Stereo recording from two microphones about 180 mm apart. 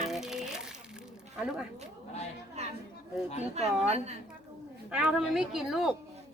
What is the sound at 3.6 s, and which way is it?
Speech, 35° right (ahead or behind).